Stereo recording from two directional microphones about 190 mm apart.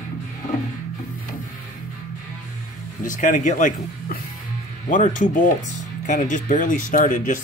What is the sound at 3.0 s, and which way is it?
Speech, 40° left (ahead or behind).